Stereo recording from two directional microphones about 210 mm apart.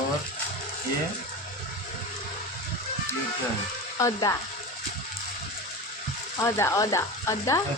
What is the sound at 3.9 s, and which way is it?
Frying, 15° left (ahead or behind).